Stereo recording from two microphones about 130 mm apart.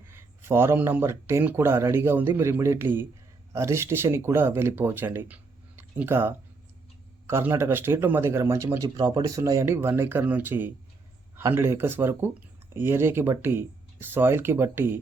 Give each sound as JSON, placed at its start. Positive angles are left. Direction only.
{"t": 0.1, "sound": "speech", "side_deg": -20}